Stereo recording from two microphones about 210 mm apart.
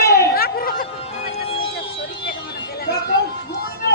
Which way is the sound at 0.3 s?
45° left (ahead or behind).